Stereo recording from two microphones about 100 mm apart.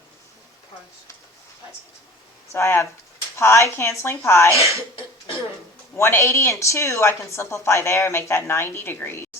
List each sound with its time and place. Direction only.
2.5 s a woman's voice: 25° left (ahead or behind)
6.0 s a woman's voice: 25° left (ahead or behind)